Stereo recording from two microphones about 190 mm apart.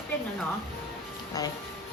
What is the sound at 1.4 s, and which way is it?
Music, 20° left (ahead or behind).